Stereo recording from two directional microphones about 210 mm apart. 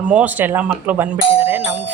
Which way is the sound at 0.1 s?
5° right (ahead or behind).